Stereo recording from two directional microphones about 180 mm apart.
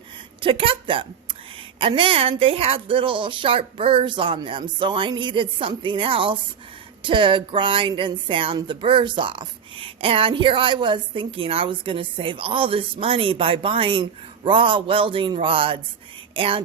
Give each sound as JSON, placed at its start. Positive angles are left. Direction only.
{"t": 0.4, "sound": "a woman's voice", "side_deg": -30}